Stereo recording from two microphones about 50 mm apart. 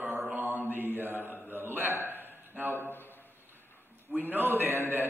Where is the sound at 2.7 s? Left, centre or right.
Left.